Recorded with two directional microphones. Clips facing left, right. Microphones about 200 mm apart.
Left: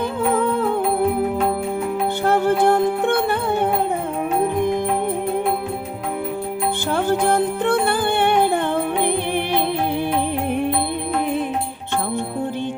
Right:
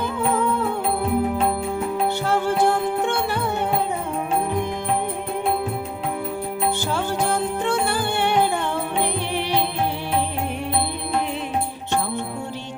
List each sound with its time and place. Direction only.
2.2 s music: 55° left (ahead or behind)
6.9 s music: 55° left (ahead or behind)